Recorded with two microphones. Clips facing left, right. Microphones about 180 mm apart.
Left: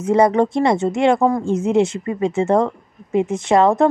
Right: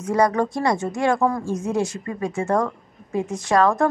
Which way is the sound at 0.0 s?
25° left (ahead or behind).